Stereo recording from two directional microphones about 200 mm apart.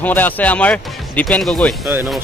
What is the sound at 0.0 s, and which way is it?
Speech, 10° left (ahead or behind).